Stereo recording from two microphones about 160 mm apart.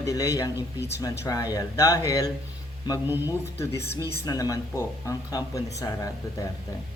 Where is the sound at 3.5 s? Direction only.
15° left (ahead or behind).